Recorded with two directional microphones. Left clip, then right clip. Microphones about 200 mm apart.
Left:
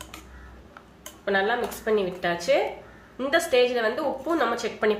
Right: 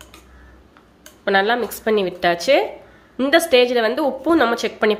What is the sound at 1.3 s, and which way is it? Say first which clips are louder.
A woman's voice: right 7 dB; 50° right (ahead or behind).